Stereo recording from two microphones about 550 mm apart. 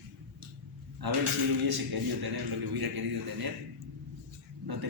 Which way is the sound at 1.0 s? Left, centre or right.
Right.